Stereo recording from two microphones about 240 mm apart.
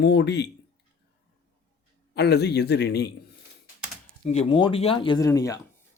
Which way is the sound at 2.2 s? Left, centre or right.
Left.